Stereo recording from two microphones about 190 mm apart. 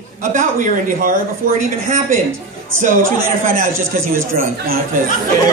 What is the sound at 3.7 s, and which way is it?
Speech, 15° right (ahead or behind).